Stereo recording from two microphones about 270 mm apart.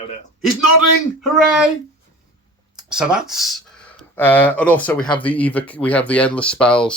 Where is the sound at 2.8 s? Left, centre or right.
Centre.